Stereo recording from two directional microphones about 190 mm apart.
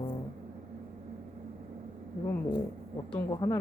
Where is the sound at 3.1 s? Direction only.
20° left (ahead or behind).